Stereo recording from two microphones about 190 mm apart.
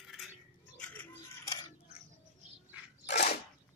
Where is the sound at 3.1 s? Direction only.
60° left (ahead or behind).